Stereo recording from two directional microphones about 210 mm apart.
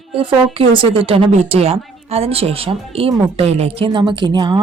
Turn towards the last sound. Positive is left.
turn(degrees=-20)  # may be behind; listen again after turning